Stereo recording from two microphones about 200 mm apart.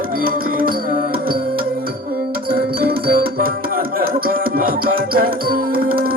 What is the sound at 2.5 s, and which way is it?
Music, 50° right (ahead or behind).